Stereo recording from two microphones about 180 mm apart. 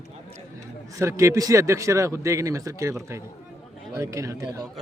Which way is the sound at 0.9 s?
15° right (ahead or behind).